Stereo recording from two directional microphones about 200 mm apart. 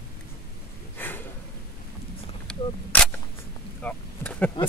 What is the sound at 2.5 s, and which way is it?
Single-lens reflex camera, 5° left (ahead or behind).